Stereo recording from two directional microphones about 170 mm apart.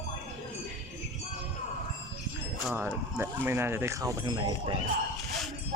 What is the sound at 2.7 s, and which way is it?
Speech, 15° right (ahead or behind).